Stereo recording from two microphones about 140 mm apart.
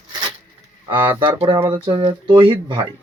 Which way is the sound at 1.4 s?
40° right (ahead or behind).